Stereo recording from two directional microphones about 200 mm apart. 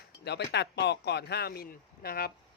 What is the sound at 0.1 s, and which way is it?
Speech, 55° left (ahead or behind).